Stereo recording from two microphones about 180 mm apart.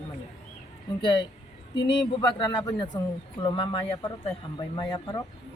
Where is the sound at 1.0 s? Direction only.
25° left (ahead or behind).